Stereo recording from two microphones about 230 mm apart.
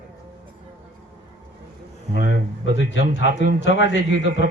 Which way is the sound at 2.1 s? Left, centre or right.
Right.